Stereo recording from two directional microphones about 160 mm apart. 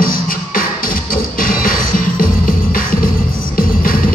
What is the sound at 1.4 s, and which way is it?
Music, 60° left (ahead or behind).